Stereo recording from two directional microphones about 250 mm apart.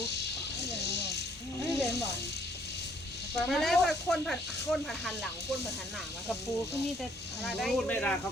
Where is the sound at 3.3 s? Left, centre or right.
Centre.